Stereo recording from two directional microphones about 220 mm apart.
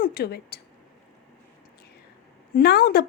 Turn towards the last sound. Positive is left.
turn(degrees=45)  # may be behind; listen again after turning